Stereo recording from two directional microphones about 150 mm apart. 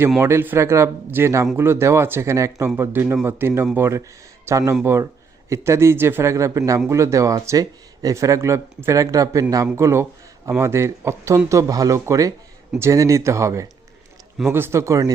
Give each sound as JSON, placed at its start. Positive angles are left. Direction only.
{"t": 0.2, "sound": "a man's voice", "side_deg": -15}